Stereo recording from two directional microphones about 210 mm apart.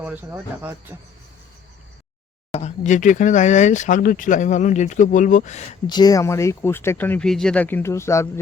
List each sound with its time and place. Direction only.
0.0 s speech: 10° right (ahead or behind)
2.5 s speech: 30° left (ahead or behind)
5.9 s speech: 20° left (ahead or behind)